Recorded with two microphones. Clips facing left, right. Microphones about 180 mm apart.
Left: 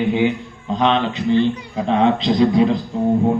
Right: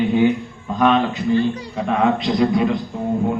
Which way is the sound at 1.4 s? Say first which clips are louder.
Left 2 dB; 40° right (ahead or behind).